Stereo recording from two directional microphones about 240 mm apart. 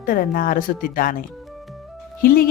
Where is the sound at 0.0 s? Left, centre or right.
Left.